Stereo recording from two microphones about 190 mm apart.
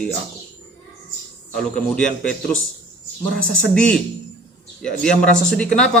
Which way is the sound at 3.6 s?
5° left (ahead or behind).